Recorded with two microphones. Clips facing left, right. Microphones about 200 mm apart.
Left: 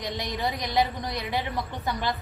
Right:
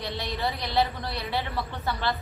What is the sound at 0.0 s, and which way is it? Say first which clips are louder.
A woman's voice: left 1 dB; 15° left (ahead or behind).